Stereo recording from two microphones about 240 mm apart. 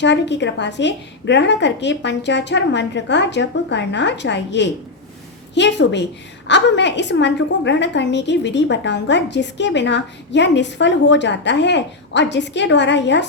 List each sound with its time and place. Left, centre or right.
0.0 s a woman's voice: left